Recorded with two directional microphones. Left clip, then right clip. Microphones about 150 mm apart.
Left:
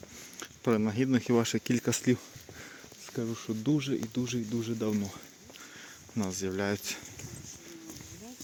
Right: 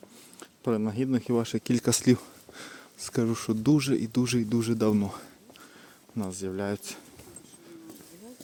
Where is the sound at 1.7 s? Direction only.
30° right (ahead or behind).